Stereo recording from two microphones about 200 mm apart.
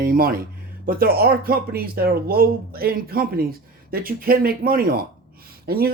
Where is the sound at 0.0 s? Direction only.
45° right (ahead or behind).